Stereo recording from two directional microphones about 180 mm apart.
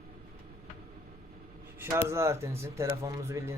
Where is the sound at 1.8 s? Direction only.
15° right (ahead or behind).